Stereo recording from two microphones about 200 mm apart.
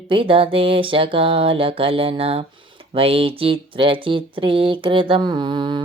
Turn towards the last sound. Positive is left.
turn(degrees=-20)  # may be behind; listen again after turning